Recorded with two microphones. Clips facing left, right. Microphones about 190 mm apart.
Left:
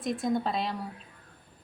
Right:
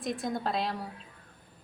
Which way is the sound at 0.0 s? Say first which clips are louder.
Left 4 dB; centre (ahead or behind).